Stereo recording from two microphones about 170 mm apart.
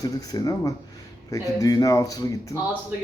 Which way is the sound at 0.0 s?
20° left (ahead or behind).